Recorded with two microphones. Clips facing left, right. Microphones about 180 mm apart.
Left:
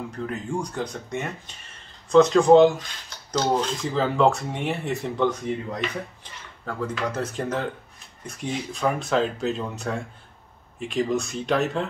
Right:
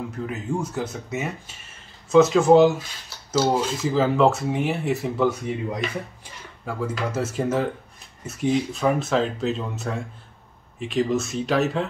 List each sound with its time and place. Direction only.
0.3 s speech: 5° right (ahead or behind)